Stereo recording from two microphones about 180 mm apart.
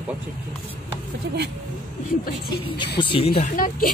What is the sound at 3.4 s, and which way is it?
Speech, 50° left (ahead or behind).